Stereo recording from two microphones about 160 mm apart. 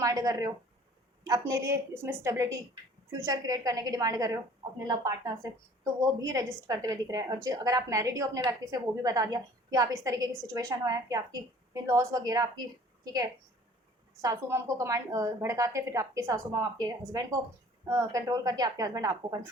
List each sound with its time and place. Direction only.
0.0 s a woman's voice: 20° right (ahead or behind)
14.2 s a woman's voice: 20° right (ahead or behind)